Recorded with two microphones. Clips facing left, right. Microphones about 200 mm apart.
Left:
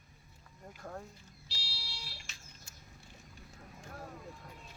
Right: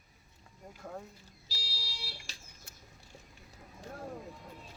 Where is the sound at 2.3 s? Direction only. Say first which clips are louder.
Right 4 dB; 35° right (ahead or behind).